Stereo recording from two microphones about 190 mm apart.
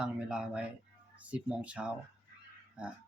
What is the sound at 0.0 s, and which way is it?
Speech, 5° right (ahead or behind).